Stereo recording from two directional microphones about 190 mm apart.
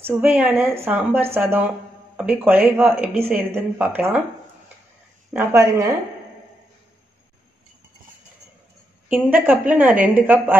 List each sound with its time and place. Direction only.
0.0 s speech: 10° right (ahead or behind)
5.3 s speech: 15° right (ahead or behind)
9.1 s speech: 10° right (ahead or behind)